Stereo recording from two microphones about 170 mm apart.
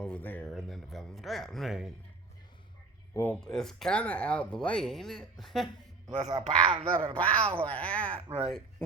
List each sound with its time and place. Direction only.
0.0 s speech: 10° left (ahead or behind)
3.4 s speech: centre (ahead or behind)
6.2 s speech: 30° right (ahead or behind)
7.1 s speech: 5° left (ahead or behind)
7.4 s speech: 30° right (ahead or behind)
7.7 s speech: 5° left (ahead or behind)
8.1 s speech: 35° right (ahead or behind)